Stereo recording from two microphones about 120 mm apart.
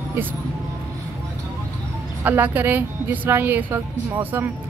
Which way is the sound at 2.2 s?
15° right (ahead or behind).